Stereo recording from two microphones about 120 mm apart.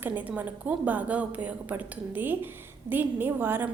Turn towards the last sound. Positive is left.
turn(degrees=-15)  # may be behind; listen again after turning